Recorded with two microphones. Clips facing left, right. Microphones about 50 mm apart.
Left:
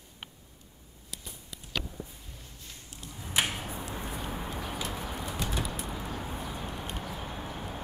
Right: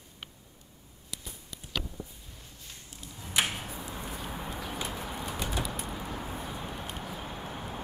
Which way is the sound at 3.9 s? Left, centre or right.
Centre.